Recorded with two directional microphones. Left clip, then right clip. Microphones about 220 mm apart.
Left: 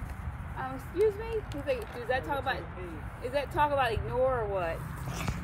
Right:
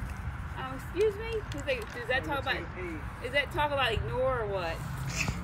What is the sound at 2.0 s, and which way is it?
Speech, 10° left (ahead or behind).